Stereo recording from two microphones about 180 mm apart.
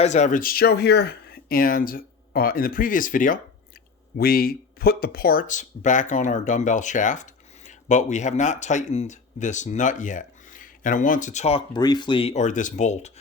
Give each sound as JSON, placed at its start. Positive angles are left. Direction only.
{"t": 0.0, "sound": "speech", "side_deg": 40}
{"t": 11.7, "sound": "speech", "side_deg": 25}